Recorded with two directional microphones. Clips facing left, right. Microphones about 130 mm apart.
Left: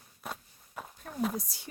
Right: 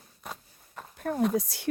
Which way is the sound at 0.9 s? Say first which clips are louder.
Right 15 dB; 65° right (ahead or behind).